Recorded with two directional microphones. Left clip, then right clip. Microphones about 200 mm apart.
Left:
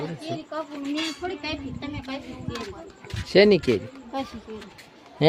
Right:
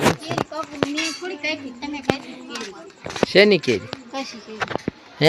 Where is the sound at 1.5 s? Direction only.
15° left (ahead or behind).